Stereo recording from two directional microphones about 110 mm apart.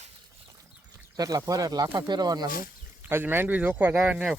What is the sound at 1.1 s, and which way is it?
Speech, 30° right (ahead or behind).